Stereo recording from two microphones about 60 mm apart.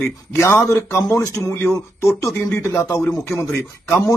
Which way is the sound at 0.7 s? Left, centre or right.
Left.